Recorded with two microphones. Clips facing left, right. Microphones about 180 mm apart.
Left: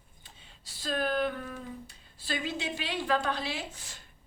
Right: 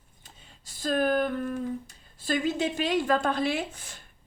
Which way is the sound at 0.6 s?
50° right (ahead or behind).